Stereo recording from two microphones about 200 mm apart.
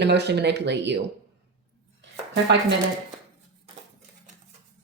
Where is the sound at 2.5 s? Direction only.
60° right (ahead or behind).